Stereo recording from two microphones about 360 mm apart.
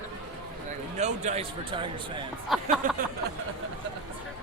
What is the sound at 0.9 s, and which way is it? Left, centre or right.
Speech, centre.